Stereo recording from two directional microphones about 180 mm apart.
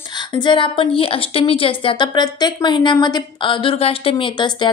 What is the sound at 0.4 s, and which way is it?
A woman's voice, 25° left (ahead or behind).